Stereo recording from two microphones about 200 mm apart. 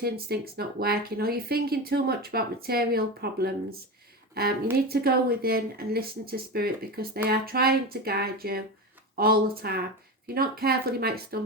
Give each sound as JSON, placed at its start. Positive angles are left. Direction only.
{"t": 0.0, "sound": "speech", "side_deg": -50}